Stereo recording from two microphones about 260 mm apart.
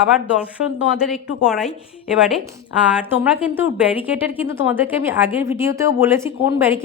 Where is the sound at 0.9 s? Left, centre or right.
Centre.